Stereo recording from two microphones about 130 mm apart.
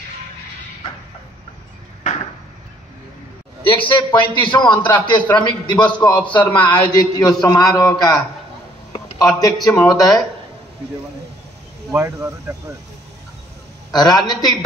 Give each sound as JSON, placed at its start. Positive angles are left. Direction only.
{"t": 3.6, "sound": "a man's voice", "side_deg": 40}
{"t": 9.4, "sound": "a man's voice", "side_deg": 30}
{"t": 11.9, "sound": "speech", "side_deg": -20}
{"t": 13.9, "sound": "a man's voice", "side_deg": 30}